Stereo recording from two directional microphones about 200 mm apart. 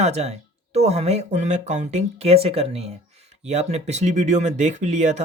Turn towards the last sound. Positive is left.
turn(degrees=-35)  # may be behind; listen again after turning